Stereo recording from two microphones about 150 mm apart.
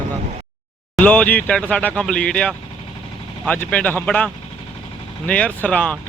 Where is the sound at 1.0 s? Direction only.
10° left (ahead or behind).